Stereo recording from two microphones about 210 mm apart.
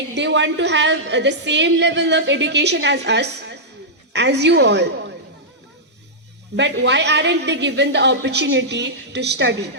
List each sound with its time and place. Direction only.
0.2 s a woman's voice: 60° right (ahead or behind)
6.6 s a woman's voice: 55° right (ahead or behind)